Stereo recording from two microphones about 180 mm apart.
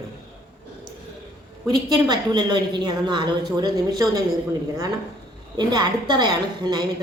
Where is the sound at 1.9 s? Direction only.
25° right (ahead or behind).